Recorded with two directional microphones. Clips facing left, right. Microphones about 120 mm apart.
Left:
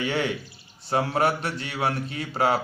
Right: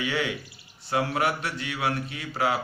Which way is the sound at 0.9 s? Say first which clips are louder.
Left 3 dB; 35° left (ahead or behind).